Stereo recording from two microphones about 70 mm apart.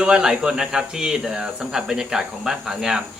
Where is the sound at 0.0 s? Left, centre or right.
Centre.